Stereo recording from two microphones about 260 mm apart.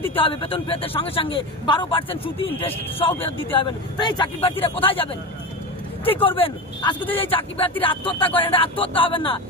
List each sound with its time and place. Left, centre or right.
0.1 s a man's voice: left
3.5 s a man's voice: centre